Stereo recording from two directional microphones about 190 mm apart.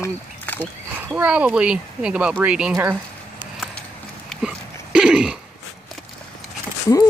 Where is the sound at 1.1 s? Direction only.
5° right (ahead or behind).